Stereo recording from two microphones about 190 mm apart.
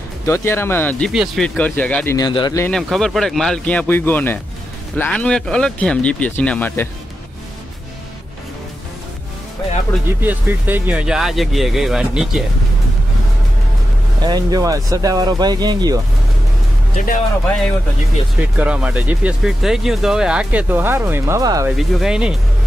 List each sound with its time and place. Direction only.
0.3 s speech: 15° left (ahead or behind)
2.1 s speech: 20° left (ahead or behind)
2.6 s speech: centre (ahead or behind)
10.2 s speech: 10° right (ahead or behind)
14.2 s speech: 20° right (ahead or behind)
16.9 s speech: 45° left (ahead or behind)
18.6 s speech: 5° right (ahead or behind)
21.6 s speech: 5° right (ahead or behind)